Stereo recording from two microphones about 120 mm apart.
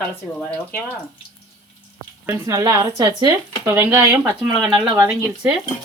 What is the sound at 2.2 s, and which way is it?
Speech, 30° right (ahead or behind).